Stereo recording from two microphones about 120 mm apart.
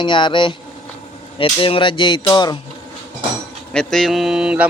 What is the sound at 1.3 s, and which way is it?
Music, 45° left (ahead or behind).